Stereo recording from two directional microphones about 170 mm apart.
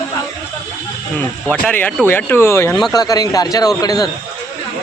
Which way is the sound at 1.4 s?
10° left (ahead or behind).